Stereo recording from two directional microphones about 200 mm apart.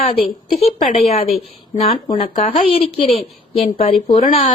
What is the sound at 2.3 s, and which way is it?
A woman's voice, 30° left (ahead or behind).